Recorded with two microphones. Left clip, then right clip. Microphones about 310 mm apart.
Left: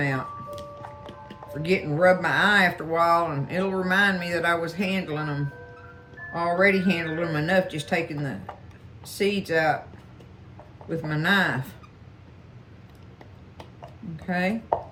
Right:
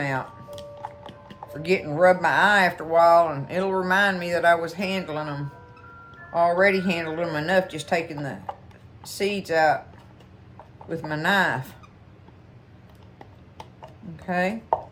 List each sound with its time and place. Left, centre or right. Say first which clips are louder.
1.6 s speech: right 2 dB; centre
10.8 s speech: even; centre
14.3 s speech: right 2 dB; centre